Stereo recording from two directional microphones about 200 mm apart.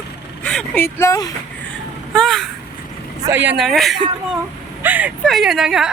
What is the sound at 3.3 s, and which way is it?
Speech, 10° right (ahead or behind).